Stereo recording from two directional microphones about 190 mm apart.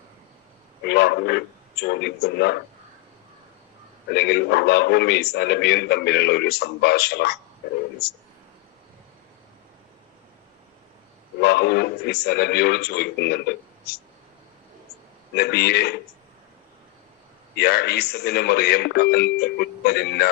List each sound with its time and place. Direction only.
0.9 s a man's voice: 60° left (ahead or behind)
4.1 s a man's voice: 60° left (ahead or behind)
11.3 s a man's voice: 60° left (ahead or behind)
15.4 s a man's voice: 60° left (ahead or behind)
17.5 s a man's voice: 60° left (ahead or behind)